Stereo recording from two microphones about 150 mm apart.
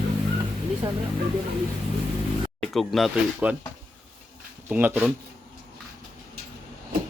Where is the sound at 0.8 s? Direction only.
30° right (ahead or behind).